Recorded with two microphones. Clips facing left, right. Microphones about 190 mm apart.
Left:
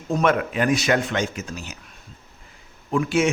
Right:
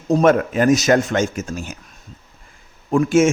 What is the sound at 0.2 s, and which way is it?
A man's voice, 40° right (ahead or behind).